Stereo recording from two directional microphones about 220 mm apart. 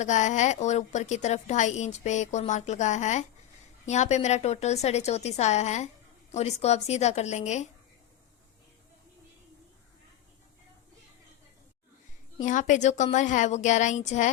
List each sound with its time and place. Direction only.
0.0 s a woman's voice: 35° left (ahead or behind)
12.4 s a woman's voice: 35° left (ahead or behind)